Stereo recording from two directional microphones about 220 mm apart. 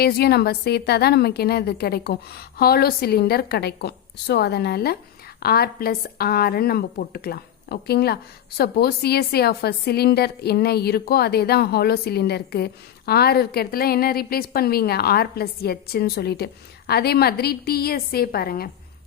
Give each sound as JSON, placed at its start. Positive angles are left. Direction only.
{"t": 0.0, "sound": "speech", "side_deg": 45}